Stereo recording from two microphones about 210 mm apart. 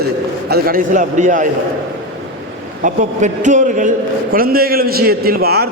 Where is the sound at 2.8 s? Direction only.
35° right (ahead or behind).